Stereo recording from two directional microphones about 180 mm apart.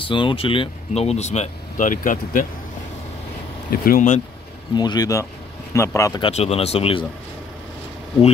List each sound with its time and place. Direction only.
0.0 s speech: 30° left (ahead or behind); by 2.4 s 45° left (ahead or behind)
3.7 s speech: 55° left (ahead or behind)
4.7 s speech: 20° left (ahead or behind)
6.2 s speech: 35° left (ahead or behind)